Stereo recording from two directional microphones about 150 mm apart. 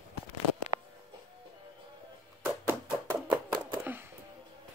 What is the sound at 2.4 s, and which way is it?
Music, 15° right (ahead or behind).